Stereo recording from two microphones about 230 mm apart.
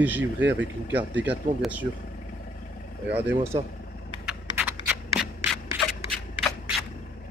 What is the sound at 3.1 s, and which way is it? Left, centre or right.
Speech, centre.